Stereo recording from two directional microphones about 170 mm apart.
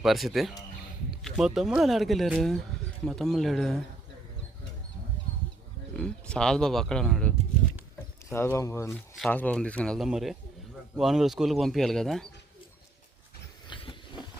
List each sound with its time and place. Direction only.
0.0 s speech: centre (ahead or behind)
6.0 s speech: 5° left (ahead or behind)
13.7 s a sound: 30° left (ahead or behind)